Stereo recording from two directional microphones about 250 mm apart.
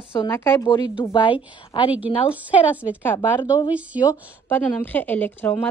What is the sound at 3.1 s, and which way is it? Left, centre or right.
Speech, centre.